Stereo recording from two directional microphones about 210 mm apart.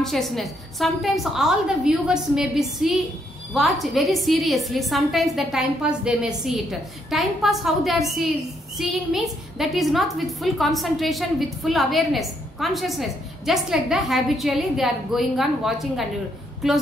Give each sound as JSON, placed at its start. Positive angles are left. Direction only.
{"t": 0.0, "sound": "a woman's voice", "side_deg": 0}